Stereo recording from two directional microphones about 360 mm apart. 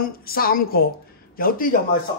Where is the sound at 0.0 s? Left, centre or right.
Left.